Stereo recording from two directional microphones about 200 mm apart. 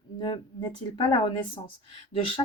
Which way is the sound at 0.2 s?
25° left (ahead or behind).